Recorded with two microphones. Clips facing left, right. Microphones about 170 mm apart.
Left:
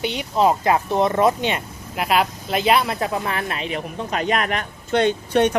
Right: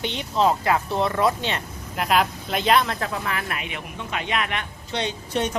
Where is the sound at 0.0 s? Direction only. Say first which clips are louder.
Left 3 dB; 10° left (ahead or behind).